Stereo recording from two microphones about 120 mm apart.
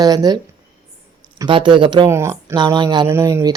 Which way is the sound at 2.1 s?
25° right (ahead or behind).